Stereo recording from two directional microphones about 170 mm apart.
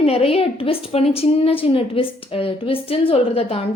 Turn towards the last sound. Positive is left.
turn(degrees=35)  # may be behind; listen again after turning